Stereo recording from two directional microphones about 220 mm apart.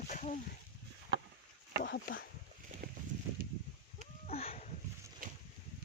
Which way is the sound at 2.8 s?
45° right (ahead or behind).